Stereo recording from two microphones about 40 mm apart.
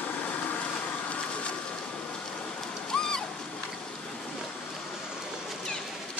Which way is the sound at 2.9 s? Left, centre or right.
Centre.